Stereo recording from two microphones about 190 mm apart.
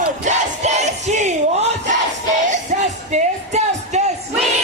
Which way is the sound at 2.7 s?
40° right (ahead or behind).